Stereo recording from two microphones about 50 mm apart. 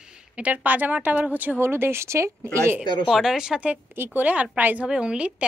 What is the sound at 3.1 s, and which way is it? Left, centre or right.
Speech, centre.